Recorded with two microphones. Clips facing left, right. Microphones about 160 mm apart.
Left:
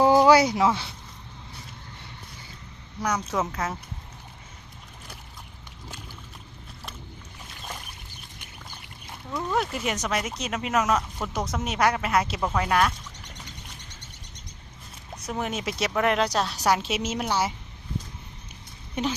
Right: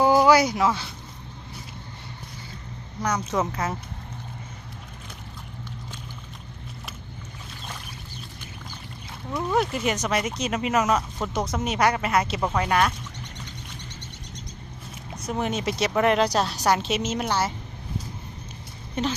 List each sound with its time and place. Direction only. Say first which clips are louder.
0.3 s speech: left 1 dB; 25° left (ahead or behind)
3.0 s speech: right 2 dB; 5° left (ahead or behind)
9.6 s speech: right 4 dB; centre (ahead or behind)
15.3 s speech: right 3 dB; centre (ahead or behind)